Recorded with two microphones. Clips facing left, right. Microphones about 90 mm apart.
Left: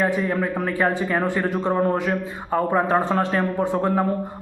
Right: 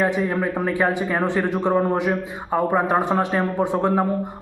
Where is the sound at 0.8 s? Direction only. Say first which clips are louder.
Left 1 dB; 20° right (ahead or behind).